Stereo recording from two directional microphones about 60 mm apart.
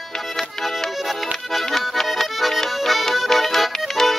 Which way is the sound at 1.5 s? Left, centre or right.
Centre.